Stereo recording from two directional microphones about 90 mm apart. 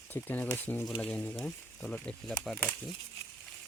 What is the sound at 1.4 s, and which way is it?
Speech, centre (ahead or behind).